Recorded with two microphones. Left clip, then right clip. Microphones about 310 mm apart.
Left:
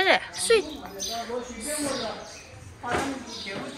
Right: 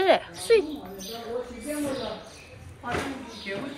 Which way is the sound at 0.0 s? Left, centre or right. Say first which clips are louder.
Even; centre.